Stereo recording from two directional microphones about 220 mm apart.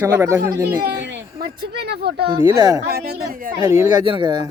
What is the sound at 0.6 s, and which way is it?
Speech, 50° right (ahead or behind).